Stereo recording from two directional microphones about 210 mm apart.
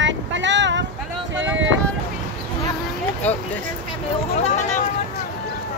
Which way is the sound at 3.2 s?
10° left (ahead or behind).